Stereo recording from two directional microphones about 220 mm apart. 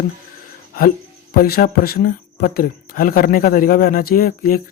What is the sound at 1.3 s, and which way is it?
Speech, 40° left (ahead or behind).